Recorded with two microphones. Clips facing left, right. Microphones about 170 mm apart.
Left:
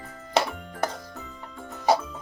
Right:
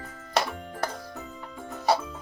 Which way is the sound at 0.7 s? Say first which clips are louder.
Left 2 dB; centre (ahead or behind).